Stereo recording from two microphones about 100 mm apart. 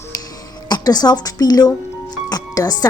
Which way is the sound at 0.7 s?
40° left (ahead or behind).